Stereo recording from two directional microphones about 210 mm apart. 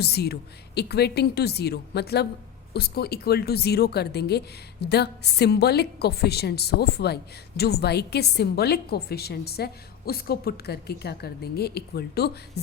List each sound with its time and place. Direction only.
0.0 s a woman's voice: 50° left (ahead or behind)